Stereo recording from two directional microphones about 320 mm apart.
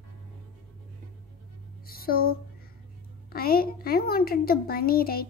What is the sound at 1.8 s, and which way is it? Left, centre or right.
Music, left.